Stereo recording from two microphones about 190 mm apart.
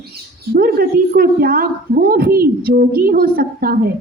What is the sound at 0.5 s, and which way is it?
A woman's voice, 50° right (ahead or behind).